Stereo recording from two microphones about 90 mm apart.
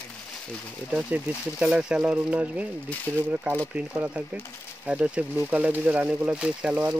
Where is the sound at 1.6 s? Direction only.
10° right (ahead or behind).